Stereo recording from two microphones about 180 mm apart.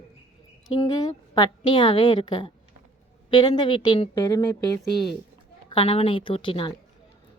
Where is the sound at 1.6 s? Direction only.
25° left (ahead or behind).